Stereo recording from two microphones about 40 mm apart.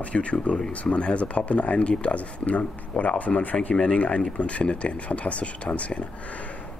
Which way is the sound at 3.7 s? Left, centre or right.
Left.